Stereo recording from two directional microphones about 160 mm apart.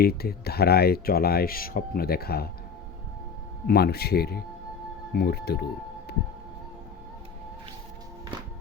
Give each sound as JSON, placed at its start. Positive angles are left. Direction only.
{"t": 0.0, "sound": "speech", "side_deg": 75}
{"t": 3.7, "sound": "speech", "side_deg": 80}